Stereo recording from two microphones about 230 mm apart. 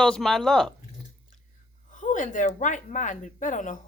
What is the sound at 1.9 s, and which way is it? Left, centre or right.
Speech, left.